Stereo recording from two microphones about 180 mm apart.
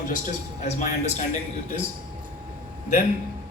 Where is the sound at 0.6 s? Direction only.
40° left (ahead or behind).